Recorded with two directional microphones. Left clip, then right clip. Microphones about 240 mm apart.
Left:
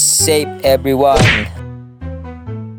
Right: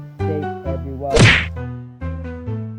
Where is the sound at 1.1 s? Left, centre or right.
Centre.